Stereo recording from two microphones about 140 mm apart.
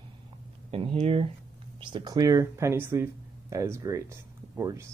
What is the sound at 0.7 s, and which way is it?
Speech, 40° right (ahead or behind).